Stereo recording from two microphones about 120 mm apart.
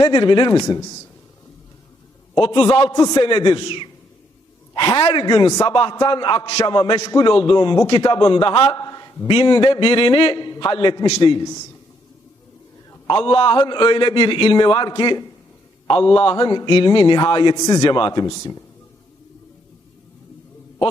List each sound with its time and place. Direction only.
0.0 s a man's voice: 45° left (ahead or behind)
2.4 s a man's voice: 45° left (ahead or behind)
8.7 s a sound: 30° left (ahead or behind)
9.2 s a man's voice: 40° left (ahead or behind)
13.1 s a man's voice: 45° left (ahead or behind)
16.5 s a man's voice: 40° left (ahead or behind)